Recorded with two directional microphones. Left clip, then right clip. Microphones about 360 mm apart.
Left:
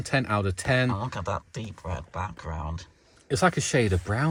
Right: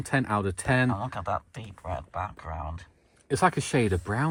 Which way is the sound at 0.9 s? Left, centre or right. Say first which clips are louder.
Even; centre.